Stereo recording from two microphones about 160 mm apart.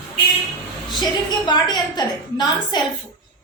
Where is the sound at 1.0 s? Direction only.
25° left (ahead or behind).